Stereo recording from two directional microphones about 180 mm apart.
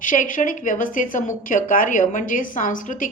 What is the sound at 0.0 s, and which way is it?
Speech, 45° left (ahead or behind).